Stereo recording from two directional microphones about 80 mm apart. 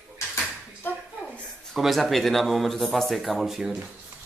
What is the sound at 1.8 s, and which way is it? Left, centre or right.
Speech, centre.